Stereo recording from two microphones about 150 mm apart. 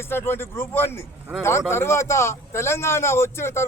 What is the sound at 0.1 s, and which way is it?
A man's voice, 15° left (ahead or behind).